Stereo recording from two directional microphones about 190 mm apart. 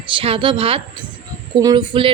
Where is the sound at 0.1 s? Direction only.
25° right (ahead or behind).